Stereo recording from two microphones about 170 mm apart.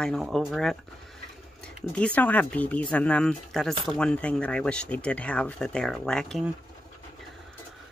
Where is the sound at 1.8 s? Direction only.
5° left (ahead or behind).